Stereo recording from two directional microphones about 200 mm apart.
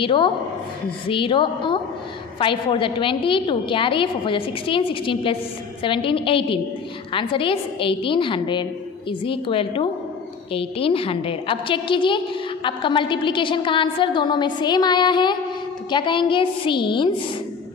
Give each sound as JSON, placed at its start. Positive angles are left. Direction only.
{"t": 0.0, "sound": "a woman's voice", "side_deg": 25}